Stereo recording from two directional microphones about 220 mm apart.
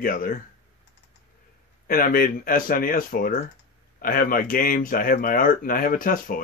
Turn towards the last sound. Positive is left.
turn(degrees=40)  # may be behind; listen again after turning